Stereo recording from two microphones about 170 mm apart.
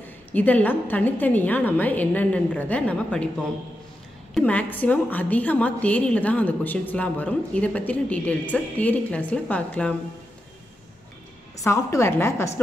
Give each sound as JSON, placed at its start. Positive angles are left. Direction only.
{"t": 0.0, "sound": "a woman's voice", "side_deg": 10}
{"t": 4.3, "sound": "a woman's voice", "side_deg": 5}
{"t": 11.5, "sound": "a woman's voice", "side_deg": 20}